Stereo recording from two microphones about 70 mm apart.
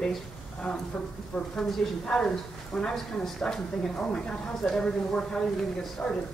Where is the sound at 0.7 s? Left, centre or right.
Left.